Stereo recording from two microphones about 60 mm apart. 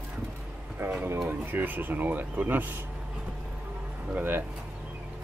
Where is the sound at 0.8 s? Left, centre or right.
Right.